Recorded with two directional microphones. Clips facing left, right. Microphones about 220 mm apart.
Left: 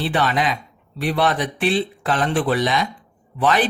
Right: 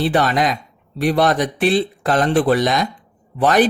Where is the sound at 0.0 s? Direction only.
40° right (ahead or behind).